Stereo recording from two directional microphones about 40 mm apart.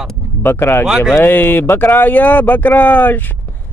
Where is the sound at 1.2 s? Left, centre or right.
Left.